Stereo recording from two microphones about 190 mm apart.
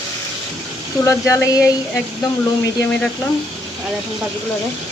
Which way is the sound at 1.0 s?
15° left (ahead or behind).